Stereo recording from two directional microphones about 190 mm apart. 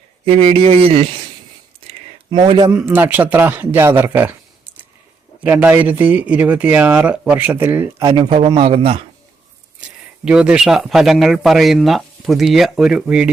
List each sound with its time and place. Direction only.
0.3 s speech: 30° right (ahead or behind)
1.9 s a sound: 25° right (ahead or behind)
2.7 s speech: 10° right (ahead or behind)
5.4 s speech: 10° right (ahead or behind)
8.0 s a man's voice: 25° right (ahead or behind)
10.2 s speech: 5° right (ahead or behind)